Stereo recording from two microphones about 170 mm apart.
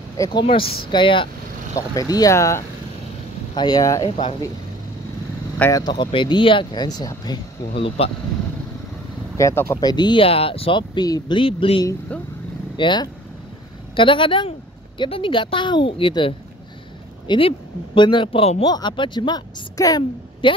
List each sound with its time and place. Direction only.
0.2 s speech: 25° left (ahead or behind)
5.6 s speech: 20° left (ahead or behind)
9.4 s speech: 15° left (ahead or behind); by 11.8 s 35° left (ahead or behind)
12.1 s speech: 10° left (ahead or behind)
12.7 s speech: 30° left (ahead or behind)